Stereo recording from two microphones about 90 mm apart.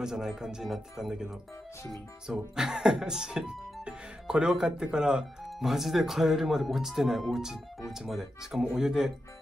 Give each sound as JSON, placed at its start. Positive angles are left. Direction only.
{"t": 0.0, "sound": "speech", "side_deg": -5}